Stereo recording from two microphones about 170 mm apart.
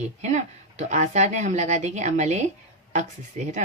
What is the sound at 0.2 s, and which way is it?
Speech, 45° right (ahead or behind).